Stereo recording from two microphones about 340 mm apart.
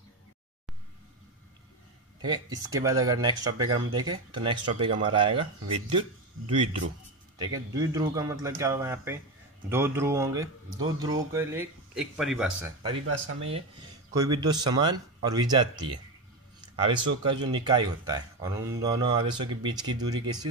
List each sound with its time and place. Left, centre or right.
2.2 s speech: centre
7.3 s speech: centre
13.4 s speech: centre
16.7 s speech: centre